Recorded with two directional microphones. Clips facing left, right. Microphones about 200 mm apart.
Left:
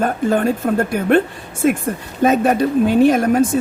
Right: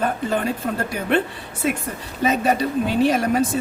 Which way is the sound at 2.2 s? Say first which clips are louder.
Left 5 dB; 50° left (ahead or behind).